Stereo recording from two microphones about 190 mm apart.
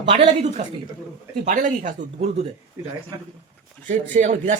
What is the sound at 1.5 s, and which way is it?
Speech, 45° right (ahead or behind).